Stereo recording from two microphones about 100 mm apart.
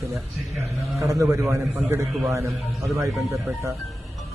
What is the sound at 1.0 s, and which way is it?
A man's voice, 35° right (ahead or behind).